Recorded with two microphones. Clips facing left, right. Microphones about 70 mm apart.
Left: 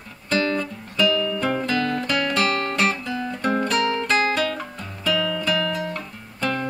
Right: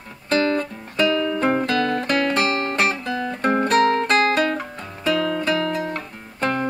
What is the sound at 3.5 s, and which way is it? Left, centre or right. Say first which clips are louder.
Music: right 5 dB; right.